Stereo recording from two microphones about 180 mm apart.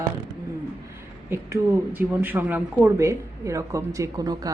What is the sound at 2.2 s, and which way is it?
A woman's voice, 10° right (ahead or behind).